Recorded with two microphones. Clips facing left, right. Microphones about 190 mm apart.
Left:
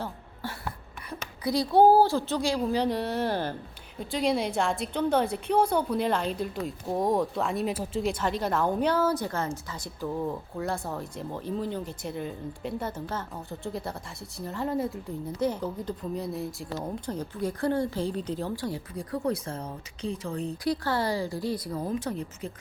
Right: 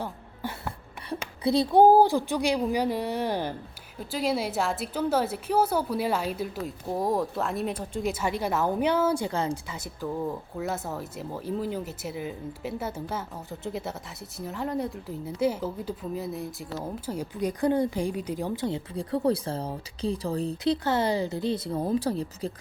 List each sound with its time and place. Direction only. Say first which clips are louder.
0.0 s music: right 2 dB; 20° right (ahead or behind)
1.5 s speech: right 2 dB; 20° right (ahead or behind)
4.0 s speech: left 1 dB; centre (ahead or behind)
8.2 s speech: right 2 dB; 10° right (ahead or behind); by 20.7 s 35° right (ahead or behind)
20.8 s a woman's voice: right 3 dB; 20° right (ahead or behind)